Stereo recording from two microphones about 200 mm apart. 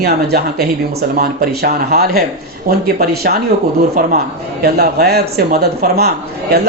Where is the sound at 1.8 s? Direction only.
50° right (ahead or behind).